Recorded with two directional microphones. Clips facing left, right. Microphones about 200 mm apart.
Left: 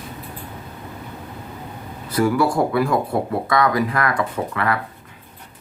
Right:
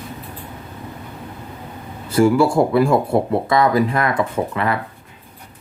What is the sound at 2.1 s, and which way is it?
Speech, 25° right (ahead or behind).